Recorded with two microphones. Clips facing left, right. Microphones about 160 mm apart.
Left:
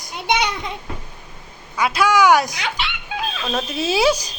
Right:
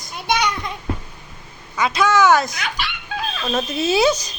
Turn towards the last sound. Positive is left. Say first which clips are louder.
# right 1 dB
turn(degrees=10)  # may be behind; listen again after turning